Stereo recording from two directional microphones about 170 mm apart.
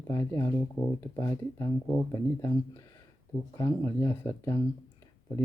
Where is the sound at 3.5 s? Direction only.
15° left (ahead or behind).